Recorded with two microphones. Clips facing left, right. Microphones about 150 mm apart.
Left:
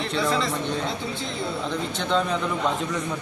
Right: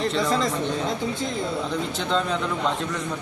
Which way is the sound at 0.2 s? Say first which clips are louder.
Left 2 dB; 40° right (ahead or behind).